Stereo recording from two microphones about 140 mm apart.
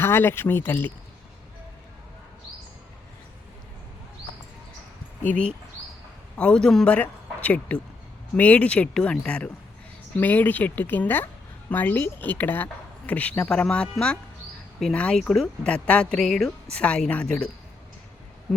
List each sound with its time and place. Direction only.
0.0 s speech: 15° left (ahead or behind)
5.2 s speech: 10° left (ahead or behind)